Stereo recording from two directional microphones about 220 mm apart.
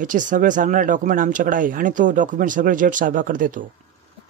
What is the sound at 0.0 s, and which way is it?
Speech, 35° right (ahead or behind).